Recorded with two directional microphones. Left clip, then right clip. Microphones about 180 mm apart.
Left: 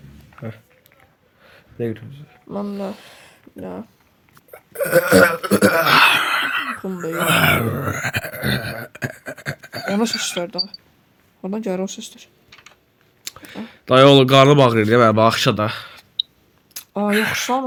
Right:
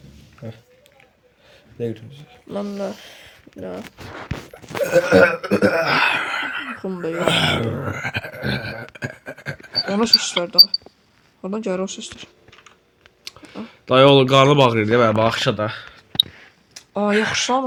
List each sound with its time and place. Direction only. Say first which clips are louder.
0.3 s speech: left 3 dB; 50° left (ahead or behind)
1.5 s a sound: left 1 dB; 50° left (ahead or behind)
2.7 s speech: right 1 dB; 15° left (ahead or behind)
4.8 s a sound: left 1 dB; 60° left (ahead or behind)
6.8 s speech: right 1 dB; 10° left (ahead or behind)
7.1 s groan: left 3 dB; 55° left (ahead or behind)
10.2 s speech: right 9 dB; 10° left (ahead or behind)
12.5 s typing: left 2 dB; 60° left (ahead or behind)
13.2 s speech: left 2 dB; 50° left (ahead or behind); by 16.0 s 70° left (ahead or behind)
16.8 s a sound: left 4 dB; 80° left
17.1 s speech: even; 65° left (ahead or behind)
17.3 s speech: right 1 dB; 15° left (ahead or behind)